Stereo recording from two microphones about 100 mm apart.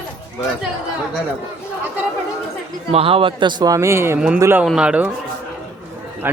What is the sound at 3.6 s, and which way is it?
Speech, 35° right (ahead or behind).